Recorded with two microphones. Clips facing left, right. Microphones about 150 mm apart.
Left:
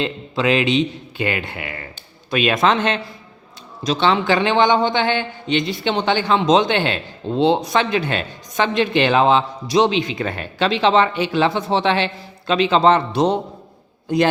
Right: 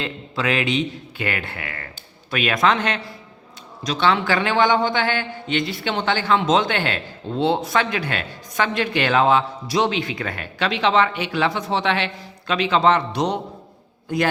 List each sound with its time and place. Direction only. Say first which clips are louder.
0.0 s a man's voice: left 5 dB; 20° left (ahead or behind)